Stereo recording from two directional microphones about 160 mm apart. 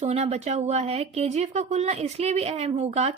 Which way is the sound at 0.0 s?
40° right (ahead or behind).